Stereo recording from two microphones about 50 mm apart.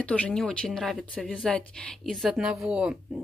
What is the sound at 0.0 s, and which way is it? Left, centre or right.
A woman's voice, left.